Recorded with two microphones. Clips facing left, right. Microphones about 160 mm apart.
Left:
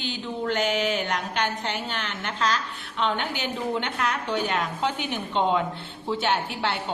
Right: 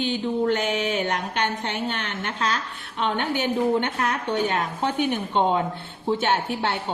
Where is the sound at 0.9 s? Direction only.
55° right (ahead or behind).